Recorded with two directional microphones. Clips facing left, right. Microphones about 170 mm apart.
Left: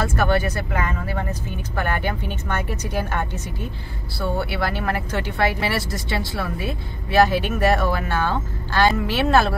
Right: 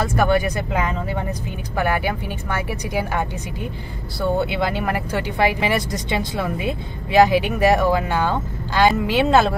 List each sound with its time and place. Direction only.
0.0 s speech: 15° right (ahead or behind)